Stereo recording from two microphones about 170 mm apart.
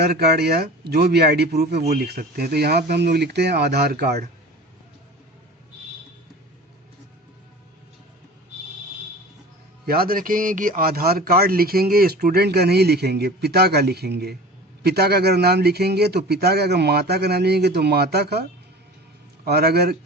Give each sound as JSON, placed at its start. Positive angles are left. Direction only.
{"t": 0.0, "sound": "speech", "side_deg": -70}
{"t": 9.8, "sound": "a man's voice", "side_deg": -60}
{"t": 19.5, "sound": "speech", "side_deg": -70}